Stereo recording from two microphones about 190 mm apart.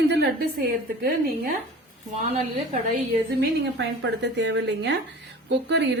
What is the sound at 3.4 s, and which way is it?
A woman's voice, 65° right (ahead or behind).